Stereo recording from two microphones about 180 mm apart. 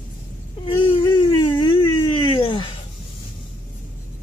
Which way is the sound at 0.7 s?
25° left (ahead or behind).